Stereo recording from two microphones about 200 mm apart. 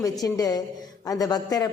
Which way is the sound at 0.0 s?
15° left (ahead or behind).